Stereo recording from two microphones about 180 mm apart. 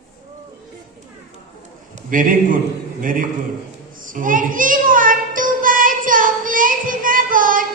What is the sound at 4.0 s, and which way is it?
Child singing, 50° right (ahead or behind).